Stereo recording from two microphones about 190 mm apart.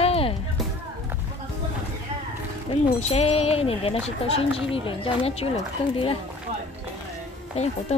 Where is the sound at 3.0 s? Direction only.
35° left (ahead or behind).